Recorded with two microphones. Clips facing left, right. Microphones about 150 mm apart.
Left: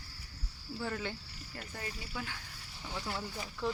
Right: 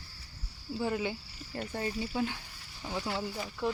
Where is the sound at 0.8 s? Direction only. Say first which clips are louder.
Right 6 dB; 15° right (ahead or behind).